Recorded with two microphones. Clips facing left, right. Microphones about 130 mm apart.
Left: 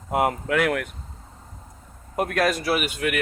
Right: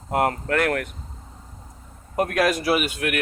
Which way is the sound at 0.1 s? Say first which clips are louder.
Even; 5° left (ahead or behind).